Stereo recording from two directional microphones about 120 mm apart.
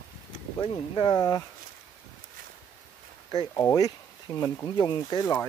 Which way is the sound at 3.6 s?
25° left (ahead or behind).